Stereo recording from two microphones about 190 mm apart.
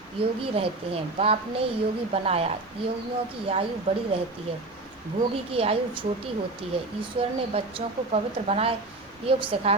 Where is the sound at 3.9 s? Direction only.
30° right (ahead or behind).